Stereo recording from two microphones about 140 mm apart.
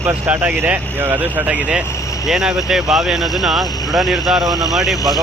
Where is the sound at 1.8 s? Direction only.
20° left (ahead or behind).